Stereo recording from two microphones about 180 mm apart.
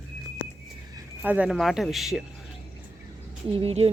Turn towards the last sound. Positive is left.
turn(degrees=-35)  # may be behind; listen again after turning